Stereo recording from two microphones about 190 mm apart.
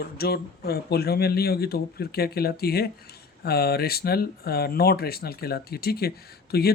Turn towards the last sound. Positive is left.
turn(degrees=55)  # may be behind; listen again after turning